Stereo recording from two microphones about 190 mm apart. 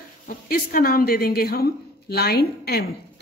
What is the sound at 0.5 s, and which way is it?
A woman's voice, 50° left (ahead or behind).